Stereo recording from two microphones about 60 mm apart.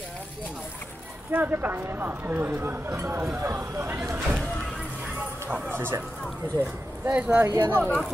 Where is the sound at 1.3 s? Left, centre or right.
Right.